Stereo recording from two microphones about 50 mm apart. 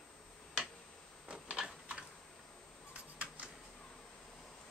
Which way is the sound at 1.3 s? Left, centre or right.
Right.